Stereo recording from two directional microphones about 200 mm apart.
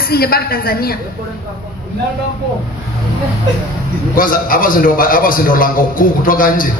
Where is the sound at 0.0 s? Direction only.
50° left (ahead or behind).